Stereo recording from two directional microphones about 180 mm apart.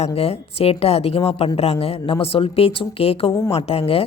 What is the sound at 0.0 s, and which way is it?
Speech, 35° left (ahead or behind).